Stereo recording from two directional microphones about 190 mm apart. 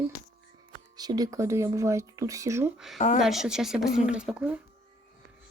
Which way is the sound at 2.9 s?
40° left (ahead or behind).